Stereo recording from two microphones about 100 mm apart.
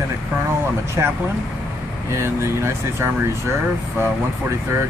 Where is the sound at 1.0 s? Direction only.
30° right (ahead or behind).